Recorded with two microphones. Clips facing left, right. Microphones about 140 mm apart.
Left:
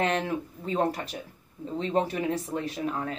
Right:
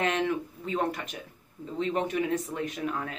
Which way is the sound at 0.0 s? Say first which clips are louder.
Even; 35° left (ahead or behind).